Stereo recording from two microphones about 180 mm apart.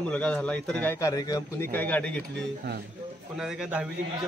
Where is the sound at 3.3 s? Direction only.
5° right (ahead or behind).